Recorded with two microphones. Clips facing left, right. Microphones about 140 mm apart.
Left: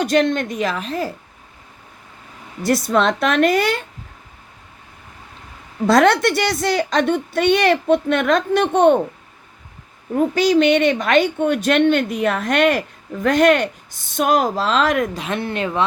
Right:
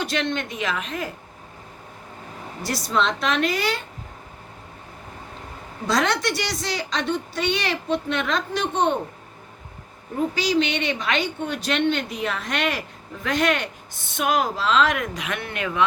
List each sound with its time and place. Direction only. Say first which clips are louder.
0.0 s a woman's voice: left 8 dB; 45° left (ahead or behind)
2.6 s a woman's voice: left 7 dB; 55° left (ahead or behind)
5.9 s a woman's voice: left 8 dB; 55° left (ahead or behind)
10.3 s a woman's voice: left 10 dB; 50° left (ahead or behind); by 15.8 s 30° left (ahead or behind)